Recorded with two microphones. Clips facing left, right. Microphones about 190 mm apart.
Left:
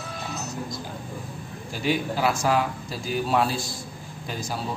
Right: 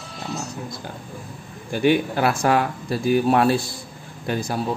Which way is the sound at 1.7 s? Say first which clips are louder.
Right 7 dB; 60° right (ahead or behind).